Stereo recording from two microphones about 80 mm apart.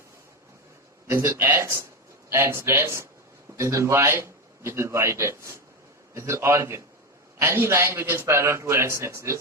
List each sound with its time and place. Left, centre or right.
1.1 s a man's voice: right